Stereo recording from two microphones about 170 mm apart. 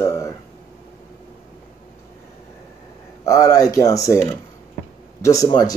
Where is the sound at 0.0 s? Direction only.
15° left (ahead or behind).